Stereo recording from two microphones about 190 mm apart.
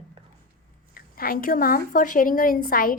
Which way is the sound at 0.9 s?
50° left (ahead or behind).